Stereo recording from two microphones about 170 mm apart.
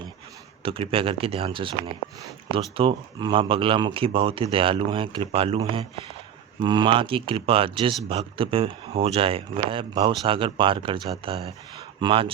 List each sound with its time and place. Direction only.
0.6 s speech: 35° right (ahead or behind)